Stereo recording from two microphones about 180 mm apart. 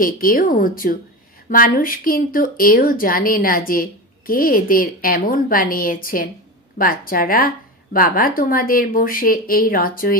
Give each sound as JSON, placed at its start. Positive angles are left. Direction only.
{"t": 0.0, "sound": "speech", "side_deg": 50}